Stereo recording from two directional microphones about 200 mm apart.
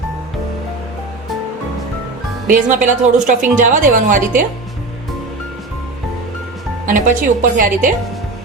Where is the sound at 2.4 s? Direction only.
40° right (ahead or behind).